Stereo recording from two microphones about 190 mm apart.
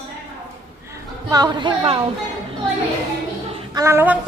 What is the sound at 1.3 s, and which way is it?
Speech, 20° right (ahead or behind).